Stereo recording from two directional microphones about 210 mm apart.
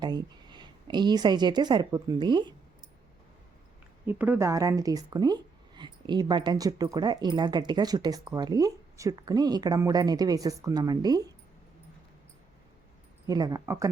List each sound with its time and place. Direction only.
0.0 s a woman's voice: 20° right (ahead or behind)
4.0 s speech: 10° right (ahead or behind)
13.2 s speech: 20° right (ahead or behind)